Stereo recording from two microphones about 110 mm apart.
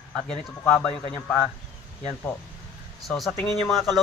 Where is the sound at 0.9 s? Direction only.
65° left (ahead or behind).